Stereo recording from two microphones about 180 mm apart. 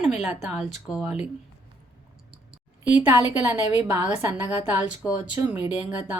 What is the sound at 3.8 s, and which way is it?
Speech, 15° right (ahead or behind).